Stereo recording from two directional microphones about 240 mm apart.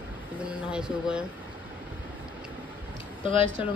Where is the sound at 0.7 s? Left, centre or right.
Centre.